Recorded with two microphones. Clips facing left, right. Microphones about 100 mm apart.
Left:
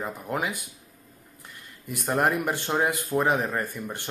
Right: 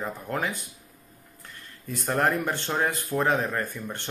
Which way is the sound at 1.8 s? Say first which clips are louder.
Left 1 dB; 15° left (ahead or behind).